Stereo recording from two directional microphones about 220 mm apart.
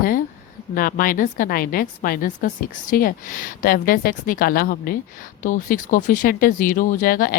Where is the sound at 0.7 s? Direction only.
40° left (ahead or behind).